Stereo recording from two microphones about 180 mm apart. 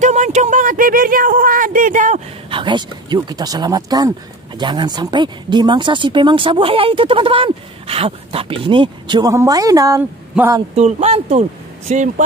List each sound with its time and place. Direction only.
0.0 s speech: 40° right (ahead or behind)
2.5 s a man's voice: 25° right (ahead or behind)
10.8 s speech: 35° right (ahead or behind)